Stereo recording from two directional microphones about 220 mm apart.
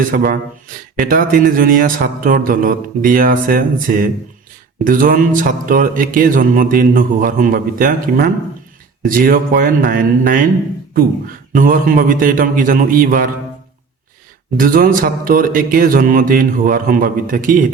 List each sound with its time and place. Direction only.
0.1 s speech: 40° right (ahead or behind)
0.9 s mantra: 40° right (ahead or behind)
14.5 s mantra: 40° right (ahead or behind)